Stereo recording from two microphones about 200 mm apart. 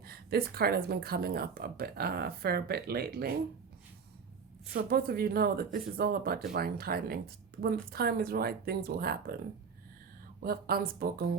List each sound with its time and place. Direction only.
0.0 s speech: 50° right (ahead or behind)
4.7 s speech: 50° right (ahead or behind)
10.4 s speech: 50° right (ahead or behind)